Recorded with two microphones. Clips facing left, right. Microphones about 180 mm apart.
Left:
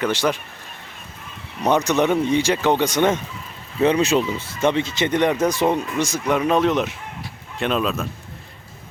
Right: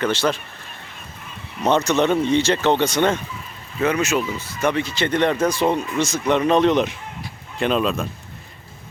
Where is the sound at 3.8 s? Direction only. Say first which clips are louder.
Left 3 dB; 30° left (ahead or behind); by 8.0 s centre (ahead or behind).